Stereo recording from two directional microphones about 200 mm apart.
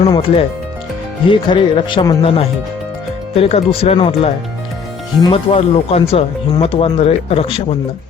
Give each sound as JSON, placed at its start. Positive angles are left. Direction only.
{"t": 0.0, "sound": "speech", "side_deg": 30}